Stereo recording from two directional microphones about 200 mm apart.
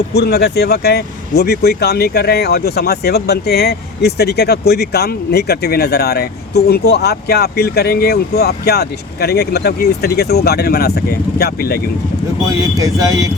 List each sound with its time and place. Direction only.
0.1 s speech: 55° left (ahead or behind)